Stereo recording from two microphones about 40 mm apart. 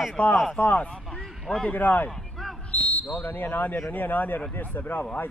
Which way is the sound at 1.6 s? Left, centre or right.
Left.